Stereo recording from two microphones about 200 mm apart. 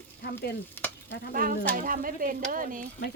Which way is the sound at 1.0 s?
60° left (ahead or behind).